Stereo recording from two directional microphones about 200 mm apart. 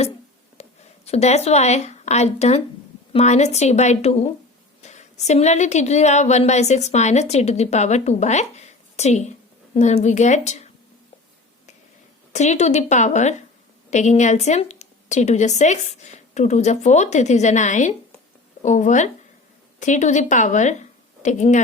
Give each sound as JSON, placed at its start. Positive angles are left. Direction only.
{"t": 0.6, "sound": "a sound", "side_deg": 35}
{"t": 1.0, "sound": "a woman's voice", "side_deg": 30}
{"t": 12.3, "sound": "a woman's voice", "side_deg": 35}